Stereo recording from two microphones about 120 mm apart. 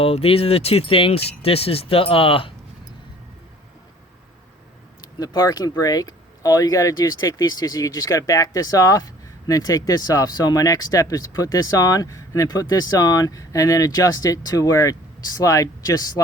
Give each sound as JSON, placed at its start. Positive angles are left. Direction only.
{"t": 0.0, "sound": "speech", "side_deg": 55}
{"t": 5.2, "sound": "speech", "side_deg": 35}